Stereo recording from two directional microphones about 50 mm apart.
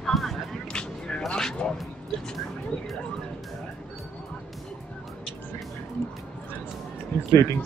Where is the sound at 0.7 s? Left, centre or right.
Centre.